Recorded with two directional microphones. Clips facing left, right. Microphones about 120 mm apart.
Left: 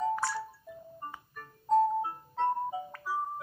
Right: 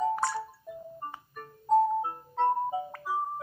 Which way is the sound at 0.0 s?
15° right (ahead or behind).